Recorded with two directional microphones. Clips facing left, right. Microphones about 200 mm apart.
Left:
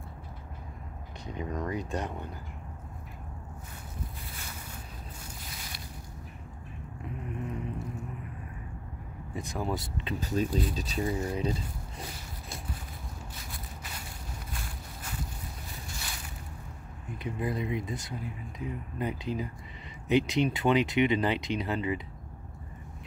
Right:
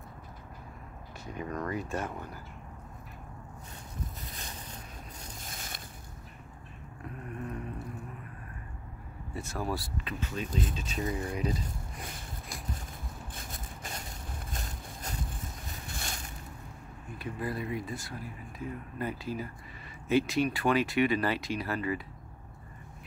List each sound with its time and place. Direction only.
1.2 s speech: 20° left (ahead or behind)
5.4 s boat: 45° right (ahead or behind)
7.2 s vehicle: 20° left (ahead or behind)
9.3 s speech: 15° left (ahead or behind)
10.2 s speech: 40° left (ahead or behind)
13.4 s a sound: 45° right (ahead or behind)
15.9 s boat: 50° right (ahead or behind)
17.2 s speech: 20° left (ahead or behind)